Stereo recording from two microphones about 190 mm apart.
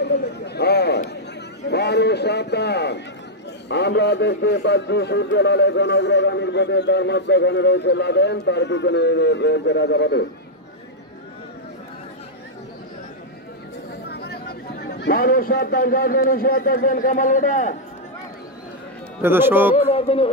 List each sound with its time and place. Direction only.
0.0 s chatter: 60° left (ahead or behind)
1.7 s a man's voice: 60° left (ahead or behind)
14.0 s a man's voice: 60° left (ahead or behind); by 17.7 s 40° left (ahead or behind)
19.2 s speech: 10° right (ahead or behind)
19.7 s speech: 30° left (ahead or behind)